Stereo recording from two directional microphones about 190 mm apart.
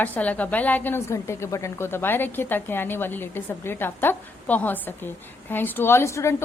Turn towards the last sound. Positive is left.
turn(degrees=15)  # may be behind; listen again after turning